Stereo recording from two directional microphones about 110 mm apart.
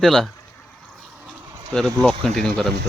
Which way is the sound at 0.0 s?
5° left (ahead or behind).